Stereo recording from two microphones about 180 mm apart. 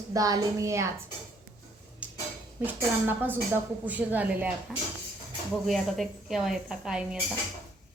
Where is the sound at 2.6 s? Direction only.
10° right (ahead or behind).